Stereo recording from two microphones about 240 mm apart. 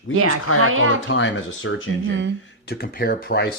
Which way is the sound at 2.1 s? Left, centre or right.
Right.